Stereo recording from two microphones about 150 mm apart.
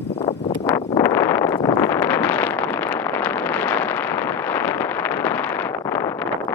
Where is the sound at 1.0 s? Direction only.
15° left (ahead or behind).